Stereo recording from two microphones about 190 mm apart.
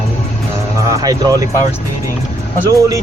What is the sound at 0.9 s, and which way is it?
Speech, 20° right (ahead or behind).